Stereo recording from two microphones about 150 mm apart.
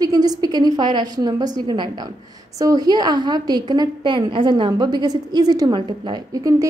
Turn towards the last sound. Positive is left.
turn(degrees=-25)  # may be behind; listen again after turning